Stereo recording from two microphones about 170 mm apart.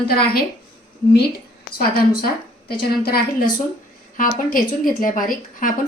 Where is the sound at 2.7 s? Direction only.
65° left (ahead or behind).